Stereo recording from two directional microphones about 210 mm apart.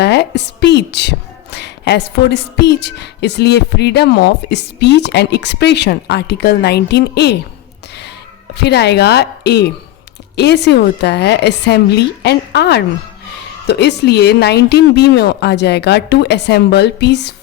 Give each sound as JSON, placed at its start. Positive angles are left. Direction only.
{"t": 0.0, "sound": "a woman's voice", "side_deg": 55}
{"t": 8.5, "sound": "a woman's voice", "side_deg": 50}